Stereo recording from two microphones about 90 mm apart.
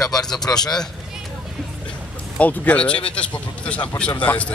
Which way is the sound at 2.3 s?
15° left (ahead or behind).